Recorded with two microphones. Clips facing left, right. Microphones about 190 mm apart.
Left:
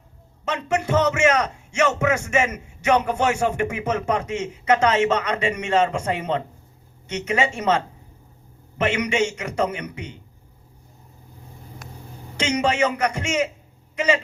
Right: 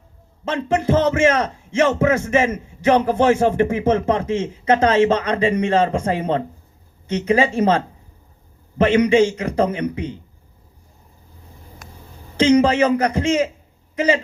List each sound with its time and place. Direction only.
0.4 s a man's voice: 35° right (ahead or behind)
8.8 s a man's voice: 30° right (ahead or behind)
12.4 s a man's voice: 35° right (ahead or behind)